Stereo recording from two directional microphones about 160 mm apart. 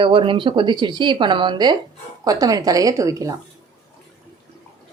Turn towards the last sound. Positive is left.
turn(degrees=-20)  # may be behind; listen again after turning